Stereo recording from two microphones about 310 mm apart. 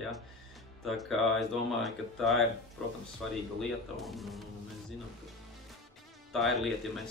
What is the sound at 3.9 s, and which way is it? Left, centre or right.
Speech, centre.